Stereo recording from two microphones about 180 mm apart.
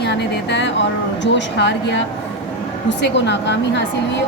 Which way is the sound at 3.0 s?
75° left (ahead or behind).